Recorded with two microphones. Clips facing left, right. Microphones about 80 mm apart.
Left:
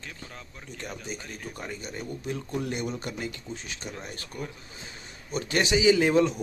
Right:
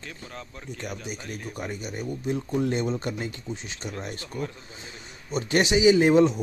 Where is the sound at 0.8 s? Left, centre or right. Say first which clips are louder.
Right 1 dB; centre.